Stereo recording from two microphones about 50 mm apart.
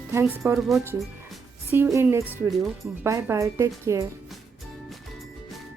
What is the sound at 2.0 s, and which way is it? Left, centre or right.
Speech, right.